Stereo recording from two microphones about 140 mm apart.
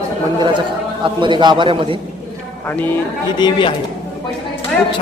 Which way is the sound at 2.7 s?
10° left (ahead or behind).